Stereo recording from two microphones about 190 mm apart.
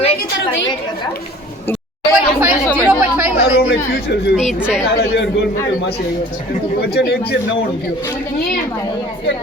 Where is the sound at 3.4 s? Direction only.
60° left (ahead or behind).